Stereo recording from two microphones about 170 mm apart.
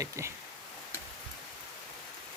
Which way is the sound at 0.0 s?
15° right (ahead or behind).